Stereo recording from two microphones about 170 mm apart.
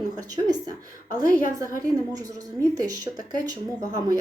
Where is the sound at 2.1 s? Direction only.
20° right (ahead or behind).